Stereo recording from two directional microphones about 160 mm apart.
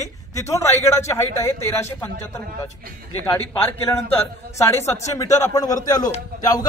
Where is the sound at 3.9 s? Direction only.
15° left (ahead or behind).